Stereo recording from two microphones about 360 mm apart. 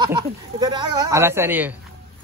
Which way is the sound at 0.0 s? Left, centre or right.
Centre.